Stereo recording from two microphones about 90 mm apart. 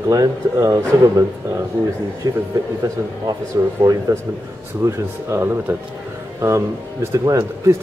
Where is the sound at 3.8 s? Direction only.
40° right (ahead or behind).